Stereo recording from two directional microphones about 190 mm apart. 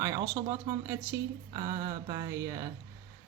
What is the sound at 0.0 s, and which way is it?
Speech, 15° right (ahead or behind).